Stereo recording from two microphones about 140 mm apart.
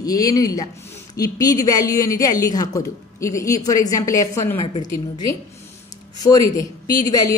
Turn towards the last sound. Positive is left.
turn(degrees=25)  # may be behind; listen again after turning